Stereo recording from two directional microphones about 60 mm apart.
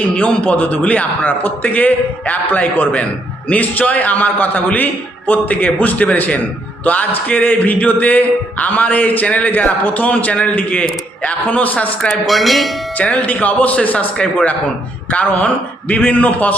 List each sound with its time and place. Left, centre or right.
0.2 s a man's voice: left
12.2 s speech: centre
13.0 s a man's voice: left